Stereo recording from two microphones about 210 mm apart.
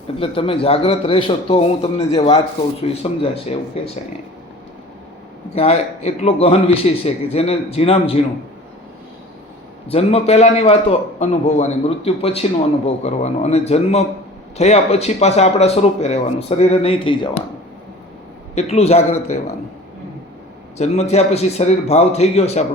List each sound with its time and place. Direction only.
0.2 s a man's voice: 25° left (ahead or behind)
5.5 s a man's voice: 30° left (ahead or behind)
9.9 s a man's voice: 30° left (ahead or behind)
18.5 s a man's voice: 30° left (ahead or behind)
20.7 s a man's voice: 30° left (ahead or behind)